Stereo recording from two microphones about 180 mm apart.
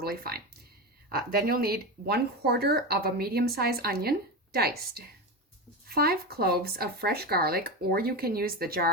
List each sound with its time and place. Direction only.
0.0 s speech: 55° right (ahead or behind)